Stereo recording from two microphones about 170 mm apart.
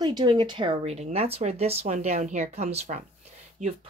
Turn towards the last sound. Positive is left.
turn(degrees=-35)  # may be behind; listen again after turning